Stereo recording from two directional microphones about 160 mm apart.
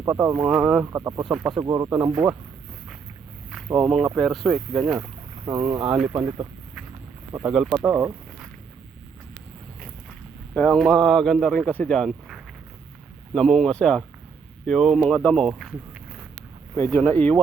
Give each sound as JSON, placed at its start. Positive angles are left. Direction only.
{"t": 0.0, "sound": "speech", "side_deg": -15}
{"t": 0.3, "sound": "speech", "side_deg": -5}
{"t": 1.6, "sound": "speech", "side_deg": -20}
{"t": 3.7, "sound": "speech", "side_deg": -5}
{"t": 5.5, "sound": "speech", "side_deg": -10}
{"t": 7.3, "sound": "speech", "side_deg": -5}
{"t": 10.5, "sound": "speech", "side_deg": 5}
{"t": 16.7, "sound": "speech", "side_deg": 15}